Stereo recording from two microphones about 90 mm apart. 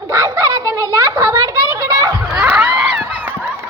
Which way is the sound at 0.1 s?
35° right (ahead or behind).